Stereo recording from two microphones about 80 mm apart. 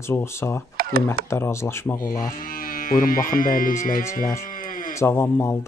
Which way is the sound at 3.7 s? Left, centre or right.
Left.